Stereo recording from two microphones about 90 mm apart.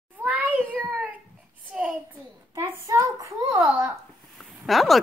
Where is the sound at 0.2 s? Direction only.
15° right (ahead or behind).